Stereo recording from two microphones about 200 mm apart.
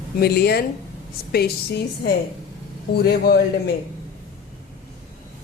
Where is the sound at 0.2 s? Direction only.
50° left (ahead or behind).